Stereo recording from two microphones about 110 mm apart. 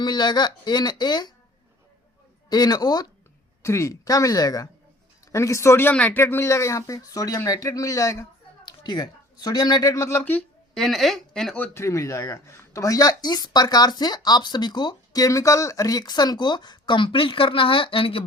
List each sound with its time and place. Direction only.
0.0 s speech: 40° left (ahead or behind)
2.5 s speech: 40° left (ahead or behind)
3.6 s speech: 25° left (ahead or behind)
8.6 s speech: 40° left (ahead or behind); by 10.4 s 15° left (ahead or behind)
10.8 s speech: centre (ahead or behind)
11.5 s speech: 20° left (ahead or behind); by 18.2 s 55° left (ahead or behind)